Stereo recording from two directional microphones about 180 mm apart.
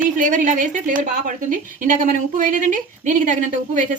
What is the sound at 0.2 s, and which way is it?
Speech, 45° right (ahead or behind).